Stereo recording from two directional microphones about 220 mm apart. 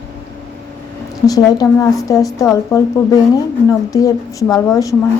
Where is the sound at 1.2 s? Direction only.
15° left (ahead or behind).